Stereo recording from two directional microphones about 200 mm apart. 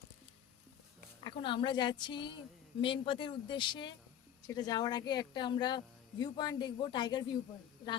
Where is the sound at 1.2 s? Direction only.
25° left (ahead or behind).